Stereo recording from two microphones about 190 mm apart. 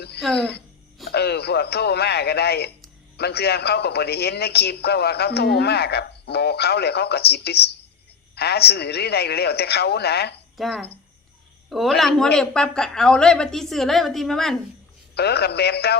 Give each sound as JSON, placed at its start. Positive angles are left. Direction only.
{"t": 1.1, "sound": "a man's voice", "side_deg": 60}
{"t": 10.6, "sound": "speech", "side_deg": 0}
{"t": 15.1, "sound": "a man's voice", "side_deg": 60}